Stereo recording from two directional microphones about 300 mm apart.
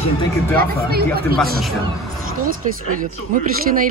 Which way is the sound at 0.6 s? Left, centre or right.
Right.